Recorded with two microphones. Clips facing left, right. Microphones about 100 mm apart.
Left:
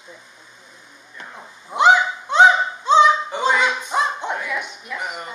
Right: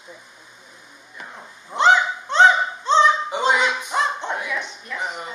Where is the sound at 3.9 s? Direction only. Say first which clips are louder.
Left 1 dB; 15° left (ahead or behind).